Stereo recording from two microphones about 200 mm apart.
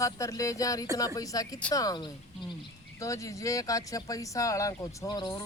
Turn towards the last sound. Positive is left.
turn(degrees=20)  # may be behind; listen again after turning